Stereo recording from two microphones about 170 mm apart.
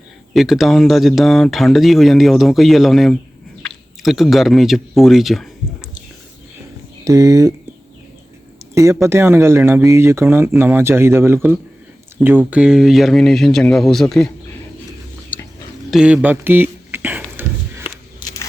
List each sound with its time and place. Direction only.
0.3 s speech: centre (ahead or behind)
7.0 s speech: 20° right (ahead or behind)
8.7 s speech: 15° right (ahead or behind); by 14.3 s centre (ahead or behind)
15.9 s a sound: 5° right (ahead or behind)